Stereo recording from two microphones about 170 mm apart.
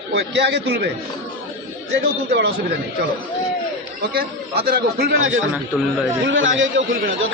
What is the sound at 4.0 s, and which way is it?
A man's voice, 65° right (ahead or behind).